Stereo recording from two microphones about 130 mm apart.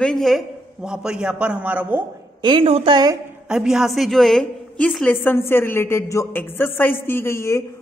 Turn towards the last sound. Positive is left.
turn(degrees=20)  # may be behind; listen again after turning